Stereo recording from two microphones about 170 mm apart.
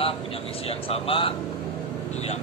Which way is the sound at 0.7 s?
35° left (ahead or behind).